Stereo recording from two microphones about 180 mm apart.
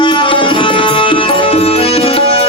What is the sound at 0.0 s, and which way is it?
Music, 30° left (ahead or behind).